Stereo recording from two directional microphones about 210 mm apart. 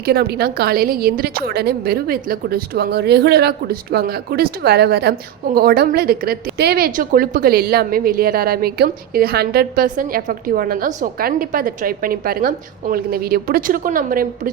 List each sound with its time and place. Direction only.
0.0 s speech: 45° right (ahead or behind)